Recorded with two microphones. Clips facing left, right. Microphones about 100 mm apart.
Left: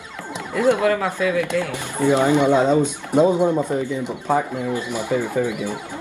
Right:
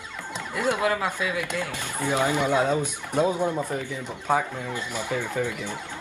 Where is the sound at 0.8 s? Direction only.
20° right (ahead or behind).